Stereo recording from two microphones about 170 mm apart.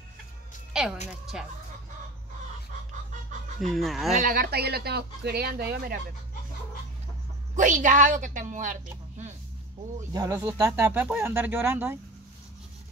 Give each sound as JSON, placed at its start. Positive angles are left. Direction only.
{"t": 0.7, "sound": "a sound", "side_deg": -5}
{"t": 1.3, "sound": "speech", "side_deg": -5}
{"t": 3.6, "sound": "speech", "side_deg": 0}
{"t": 4.1, "sound": "speech", "side_deg": -55}
{"t": 7.5, "sound": "a woman's voice", "side_deg": -50}
{"t": 10.1, "sound": "speech", "side_deg": -20}